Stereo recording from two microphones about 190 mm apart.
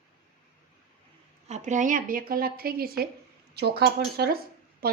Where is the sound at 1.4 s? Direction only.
40° right (ahead or behind).